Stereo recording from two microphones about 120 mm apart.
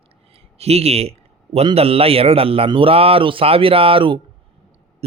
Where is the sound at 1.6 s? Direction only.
55° right (ahead or behind).